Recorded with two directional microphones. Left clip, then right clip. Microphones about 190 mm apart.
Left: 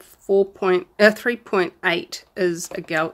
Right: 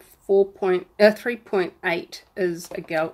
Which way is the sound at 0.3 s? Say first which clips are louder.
Left 1 dB; 25° left (ahead or behind).